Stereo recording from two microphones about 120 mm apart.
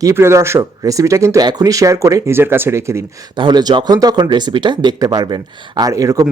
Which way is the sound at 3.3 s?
40° right (ahead or behind).